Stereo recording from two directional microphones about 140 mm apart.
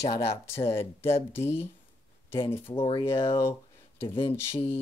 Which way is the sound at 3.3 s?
20° left (ahead or behind).